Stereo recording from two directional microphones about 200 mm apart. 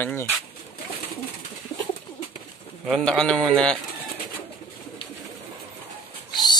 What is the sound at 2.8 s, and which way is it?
Speech, centre (ahead or behind).